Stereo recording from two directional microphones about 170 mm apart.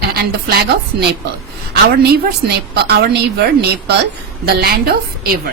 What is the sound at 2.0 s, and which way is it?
A woman's voice, 65° right (ahead or behind).